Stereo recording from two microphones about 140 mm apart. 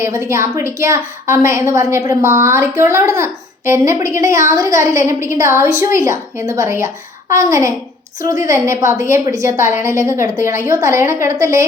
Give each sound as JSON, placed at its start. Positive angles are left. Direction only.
{"t": 0.0, "sound": "a woman's voice", "side_deg": -20}